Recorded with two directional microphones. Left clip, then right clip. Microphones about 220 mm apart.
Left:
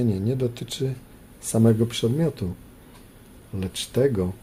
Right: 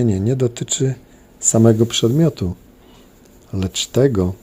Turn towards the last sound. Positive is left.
turn(degrees=-30)  # may be behind; listen again after turning